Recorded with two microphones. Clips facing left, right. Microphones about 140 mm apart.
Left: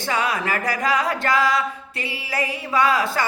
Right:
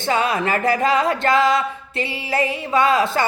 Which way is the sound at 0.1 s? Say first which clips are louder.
Right 4 dB; 25° right (ahead or behind).